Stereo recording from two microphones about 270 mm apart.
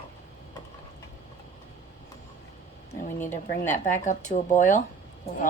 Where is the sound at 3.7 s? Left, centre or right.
Left.